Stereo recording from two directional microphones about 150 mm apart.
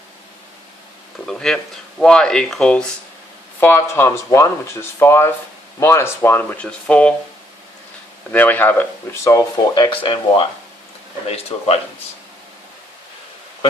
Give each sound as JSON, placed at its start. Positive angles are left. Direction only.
{"t": 1.3, "sound": "speech", "side_deg": 5}
{"t": 3.6, "sound": "speech", "side_deg": 15}
{"t": 8.3, "sound": "speech", "side_deg": 10}